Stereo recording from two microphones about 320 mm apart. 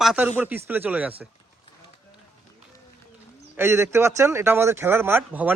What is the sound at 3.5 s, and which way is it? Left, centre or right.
Speech, centre.